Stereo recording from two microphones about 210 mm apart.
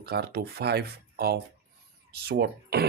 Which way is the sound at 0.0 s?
50° right (ahead or behind).